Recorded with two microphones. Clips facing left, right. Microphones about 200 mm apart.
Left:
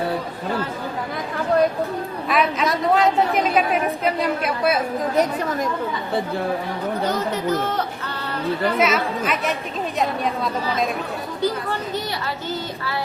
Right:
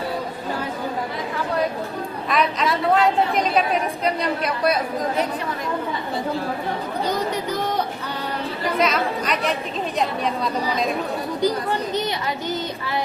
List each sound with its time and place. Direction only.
2.3 s a woman's voice: 5° left (ahead or behind)
7.1 s speech: 15° right (ahead or behind)
8.8 s a woman's voice: 5° left (ahead or behind)
11.3 s speech: 15° right (ahead or behind)